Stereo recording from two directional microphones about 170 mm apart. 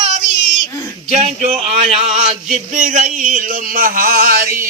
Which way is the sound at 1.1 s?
40° right (ahead or behind).